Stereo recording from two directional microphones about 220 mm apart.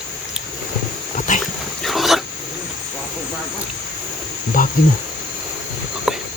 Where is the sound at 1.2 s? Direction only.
35° left (ahead or behind).